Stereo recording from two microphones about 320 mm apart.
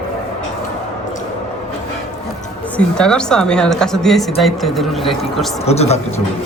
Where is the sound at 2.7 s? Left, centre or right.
Centre.